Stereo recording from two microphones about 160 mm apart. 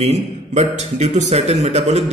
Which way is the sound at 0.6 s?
45° right (ahead or behind).